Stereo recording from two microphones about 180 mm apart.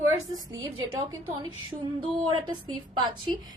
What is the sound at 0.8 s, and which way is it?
Speech, 25° right (ahead or behind).